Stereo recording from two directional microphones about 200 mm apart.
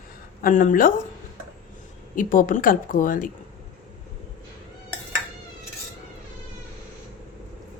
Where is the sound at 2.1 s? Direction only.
40° left (ahead or behind).